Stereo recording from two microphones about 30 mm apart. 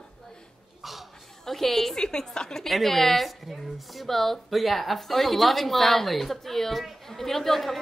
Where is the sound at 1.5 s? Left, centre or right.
Centre.